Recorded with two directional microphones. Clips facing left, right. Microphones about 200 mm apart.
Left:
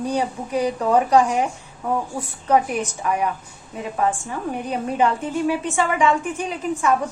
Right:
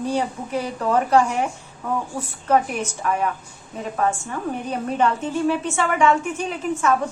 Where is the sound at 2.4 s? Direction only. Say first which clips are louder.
Left 1 dB; 15° left (ahead or behind).